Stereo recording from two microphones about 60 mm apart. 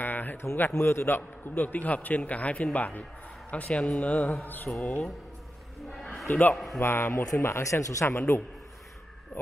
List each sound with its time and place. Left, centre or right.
0.0 s a sound: left
0.6 s a man's voice: left; by 4.8 s centre
5.9 s a sound: centre
6.5 s a man's voice: centre
6.8 s speech: left
8.1 s a man's voice: left